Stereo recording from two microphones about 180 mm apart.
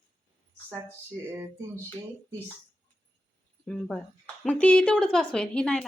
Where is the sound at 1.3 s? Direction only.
15° right (ahead or behind).